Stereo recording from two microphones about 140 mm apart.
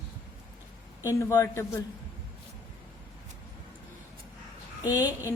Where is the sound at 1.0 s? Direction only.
20° left (ahead or behind).